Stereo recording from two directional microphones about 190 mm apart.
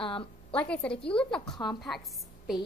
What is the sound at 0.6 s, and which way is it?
A woman's voice, 5° left (ahead or behind).